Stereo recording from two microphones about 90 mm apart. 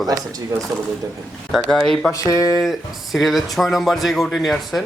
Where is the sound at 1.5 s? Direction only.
5° left (ahead or behind).